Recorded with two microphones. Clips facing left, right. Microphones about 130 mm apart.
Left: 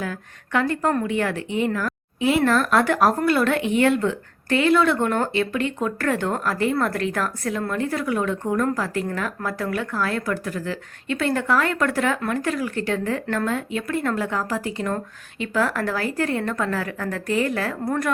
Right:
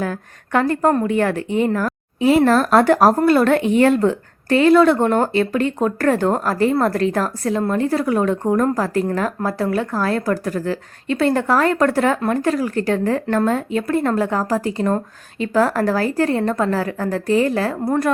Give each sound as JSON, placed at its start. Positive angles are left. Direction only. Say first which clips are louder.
{"t": 0.0, "sound": "a woman's voice", "louder": "right 6 dB", "side_deg": -45}